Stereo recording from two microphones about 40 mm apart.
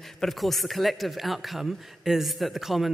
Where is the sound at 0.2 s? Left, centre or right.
Centre.